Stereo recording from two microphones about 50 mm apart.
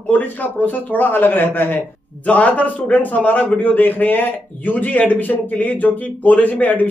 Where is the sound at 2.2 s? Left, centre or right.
Left.